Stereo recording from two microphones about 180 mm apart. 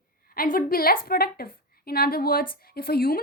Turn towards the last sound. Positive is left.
turn(degrees=55)  # may be behind; listen again after turning